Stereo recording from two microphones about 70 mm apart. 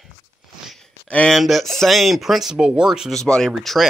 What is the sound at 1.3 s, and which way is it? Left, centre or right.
Speech, centre.